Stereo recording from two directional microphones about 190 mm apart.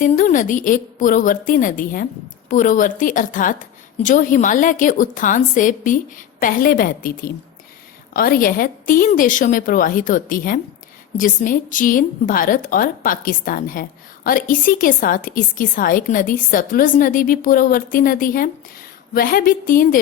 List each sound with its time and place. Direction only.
0.0 s a woman's voice: 45° left (ahead or behind)